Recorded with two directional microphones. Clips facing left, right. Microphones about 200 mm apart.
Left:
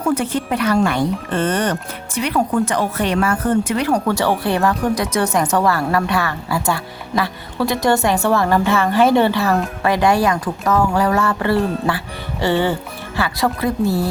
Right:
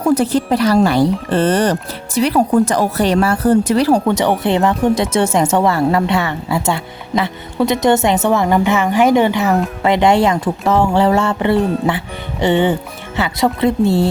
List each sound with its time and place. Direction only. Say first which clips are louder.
0.0 s speech: right 5 dB; 40° right (ahead or behind)
4.0 s a woman's voice: right 3 dB; 20° right (ahead or behind)